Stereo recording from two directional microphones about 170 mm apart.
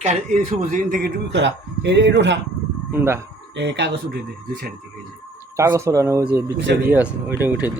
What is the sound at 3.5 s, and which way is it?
Speech, 90° right.